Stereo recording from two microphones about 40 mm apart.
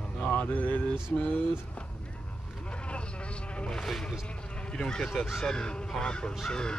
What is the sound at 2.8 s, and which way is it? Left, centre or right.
Insect, left.